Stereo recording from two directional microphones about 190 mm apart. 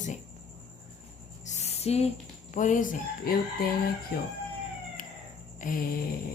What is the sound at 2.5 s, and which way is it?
Speech, 40° left (ahead or behind).